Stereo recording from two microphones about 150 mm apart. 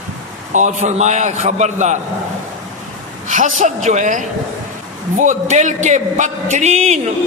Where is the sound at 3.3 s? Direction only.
55° right (ahead or behind).